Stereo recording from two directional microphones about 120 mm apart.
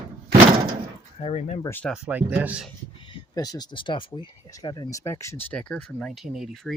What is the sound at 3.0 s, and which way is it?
Speech, 35° left (ahead or behind).